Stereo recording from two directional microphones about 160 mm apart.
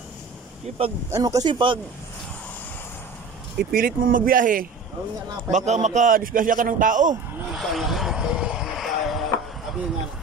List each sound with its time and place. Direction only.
0.7 s speech: 45° right (ahead or behind)
1.1 s speech: 20° right (ahead or behind)
3.7 s a man's voice: 60° right (ahead or behind)
5.5 s a man's voice: 45° right (ahead or behind)
7.5 s vehicle: centre (ahead or behind)